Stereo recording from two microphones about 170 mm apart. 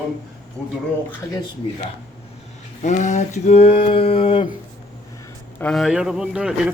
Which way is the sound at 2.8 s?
45° left (ahead or behind).